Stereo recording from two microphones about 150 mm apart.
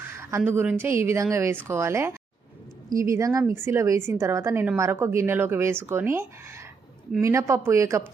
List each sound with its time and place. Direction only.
0.2 s a woman's voice: 15° right (ahead or behind)